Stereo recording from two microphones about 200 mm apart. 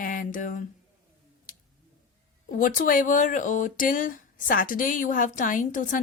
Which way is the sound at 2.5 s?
45° left (ahead or behind).